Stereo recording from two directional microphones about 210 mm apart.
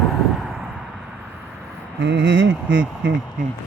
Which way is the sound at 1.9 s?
65° right (ahead or behind).